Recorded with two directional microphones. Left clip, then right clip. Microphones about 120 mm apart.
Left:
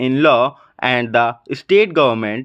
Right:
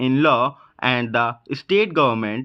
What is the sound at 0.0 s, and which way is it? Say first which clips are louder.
Speech: left 4 dB; 35° left (ahead or behind).